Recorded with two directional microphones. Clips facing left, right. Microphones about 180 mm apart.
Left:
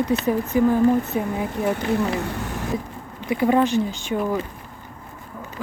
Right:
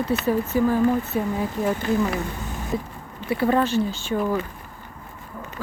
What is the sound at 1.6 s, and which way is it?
Speech, 65° left (ahead or behind).